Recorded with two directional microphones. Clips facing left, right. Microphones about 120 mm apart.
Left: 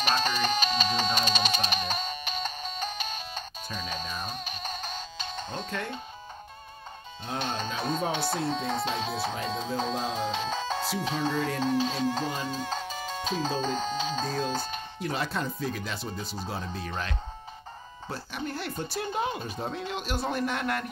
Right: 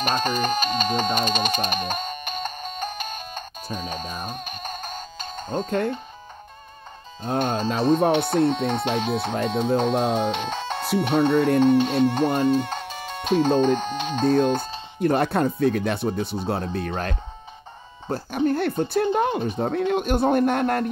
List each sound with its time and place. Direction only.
0.0 s music: 50° right (ahead or behind)
7.2 s speech: 50° right (ahead or behind)
7.6 s speech: 40° right (ahead or behind)
8.0 s speech: 60° right (ahead or behind)